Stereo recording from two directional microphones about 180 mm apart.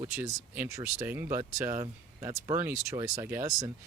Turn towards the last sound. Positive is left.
turn(degrees=-20)  # may be behind; listen again after turning